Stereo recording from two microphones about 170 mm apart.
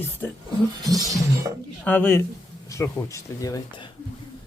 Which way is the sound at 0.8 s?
20° right (ahead or behind).